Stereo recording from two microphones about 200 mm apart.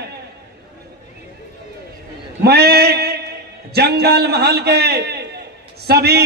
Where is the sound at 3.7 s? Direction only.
55° right (ahead or behind).